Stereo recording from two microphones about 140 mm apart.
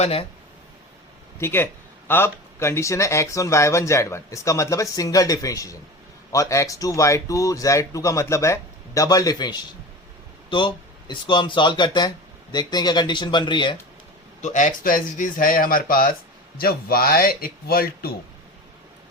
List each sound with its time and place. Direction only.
0.0 s speech: 45° left (ahead or behind)
1.4 s speech: 15° left (ahead or behind)
11.1 s speech: 35° left (ahead or behind)
14.4 s a man's voice: 60° left (ahead or behind); by 18.1 s 90° left